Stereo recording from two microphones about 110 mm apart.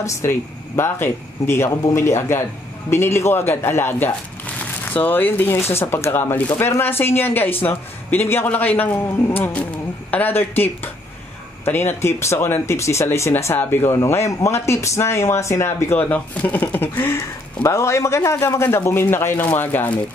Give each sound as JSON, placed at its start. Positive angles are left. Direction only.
{"t": 0.0, "sound": "a man's voice", "side_deg": 25}
{"t": 16.1, "sound": "a man's voice", "side_deg": 15}